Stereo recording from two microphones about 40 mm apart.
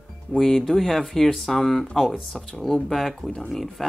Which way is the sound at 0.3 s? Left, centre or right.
Centre.